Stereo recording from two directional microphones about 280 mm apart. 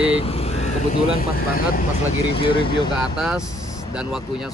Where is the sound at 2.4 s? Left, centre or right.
Centre.